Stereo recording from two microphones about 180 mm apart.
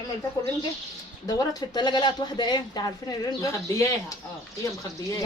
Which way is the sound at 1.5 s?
25° left (ahead or behind).